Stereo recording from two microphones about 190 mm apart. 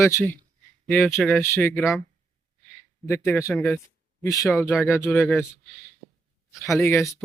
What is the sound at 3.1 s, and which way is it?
Speech, 15° left (ahead or behind).